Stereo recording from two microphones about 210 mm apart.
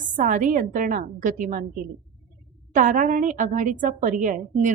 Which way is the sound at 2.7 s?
40° right (ahead or behind).